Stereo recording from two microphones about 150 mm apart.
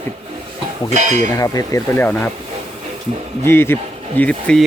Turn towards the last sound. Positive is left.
turn(degrees=5)  # may be behind; listen again after turning